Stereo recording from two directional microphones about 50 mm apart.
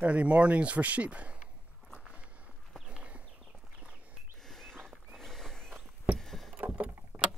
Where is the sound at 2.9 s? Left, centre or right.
Right.